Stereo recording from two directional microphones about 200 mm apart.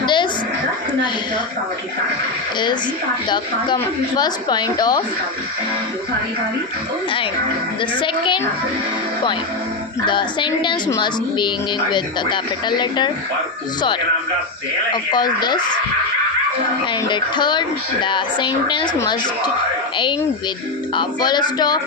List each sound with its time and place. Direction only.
0.0 s a sound: 25° left (ahead or behind)
3.2 s a woman's voice: 20° left (ahead or behind)
7.8 s a woman's voice: 25° left (ahead or behind)
10.1 s a woman's voice: 25° left (ahead or behind)
14.9 s a woman's voice: 20° left (ahead or behind)
16.8 s a woman's voice: 25° left (ahead or behind)
20.9 s a woman's voice: 20° left (ahead or behind)